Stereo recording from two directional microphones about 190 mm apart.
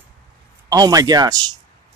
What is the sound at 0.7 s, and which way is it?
Speech, 20° right (ahead or behind).